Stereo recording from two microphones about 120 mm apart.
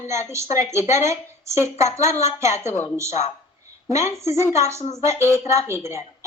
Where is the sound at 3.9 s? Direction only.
70° left (ahead or behind).